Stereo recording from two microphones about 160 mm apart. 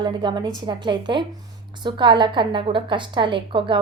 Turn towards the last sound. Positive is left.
turn(degrees=-30)  # may be behind; listen again after turning